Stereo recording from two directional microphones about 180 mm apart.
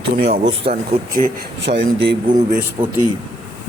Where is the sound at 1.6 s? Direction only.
70° right (ahead or behind).